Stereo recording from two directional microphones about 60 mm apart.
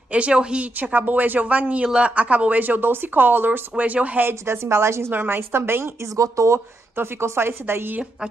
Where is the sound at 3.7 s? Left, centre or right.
Right.